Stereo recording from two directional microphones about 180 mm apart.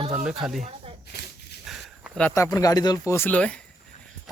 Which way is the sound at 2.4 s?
20° left (ahead or behind).